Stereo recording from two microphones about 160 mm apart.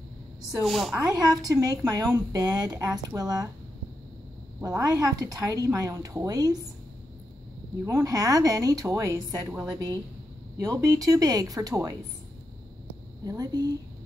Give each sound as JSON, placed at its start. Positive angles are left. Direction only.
{"t": 0.6, "sound": "a woman's voice", "side_deg": 0}
{"t": 0.9, "sound": "a woman's voice", "side_deg": -25}
{"t": 4.6, "sound": "a woman's voice", "side_deg": -20}
{"t": 7.8, "sound": "a woman's voice", "side_deg": -20}
{"t": 13.2, "sound": "a woman's voice", "side_deg": -25}